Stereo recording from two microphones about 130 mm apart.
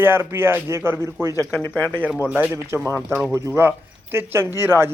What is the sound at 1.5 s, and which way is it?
Speech, 15° left (ahead or behind).